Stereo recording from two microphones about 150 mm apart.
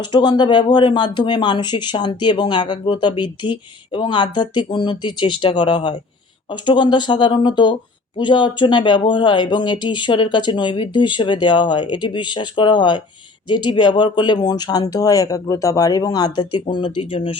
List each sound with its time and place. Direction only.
0.1 s speech: 30° left (ahead or behind)